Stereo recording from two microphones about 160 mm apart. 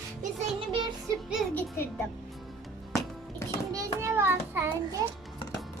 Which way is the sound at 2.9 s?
20° left (ahead or behind).